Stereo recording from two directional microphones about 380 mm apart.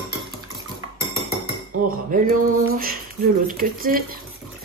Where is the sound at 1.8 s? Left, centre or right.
Right.